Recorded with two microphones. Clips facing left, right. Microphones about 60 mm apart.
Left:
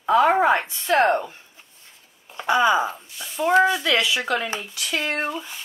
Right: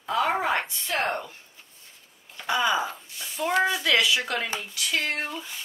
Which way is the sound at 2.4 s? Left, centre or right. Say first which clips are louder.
Left 6 dB; left.